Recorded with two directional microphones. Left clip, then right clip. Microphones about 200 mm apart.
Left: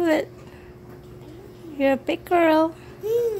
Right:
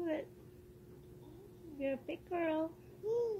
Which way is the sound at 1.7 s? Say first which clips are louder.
Left 18 dB; 30° left (ahead or behind).